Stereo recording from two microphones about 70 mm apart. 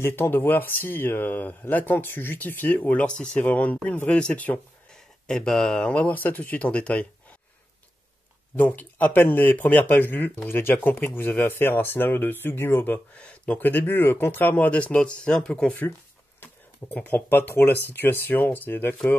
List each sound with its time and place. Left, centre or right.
0.0 s speech: left
5.2 s speech: centre
8.5 s speech: left
16.9 s speech: left